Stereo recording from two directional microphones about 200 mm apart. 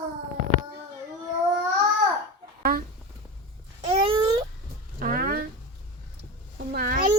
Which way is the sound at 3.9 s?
25° right (ahead or behind).